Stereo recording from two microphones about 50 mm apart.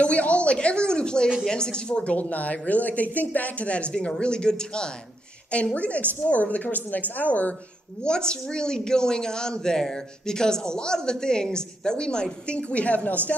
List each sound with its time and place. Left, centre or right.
0.0 s a woman's voice: left
2.1 s speech: left
5.8 s a woman's voice: left
8.0 s speech: centre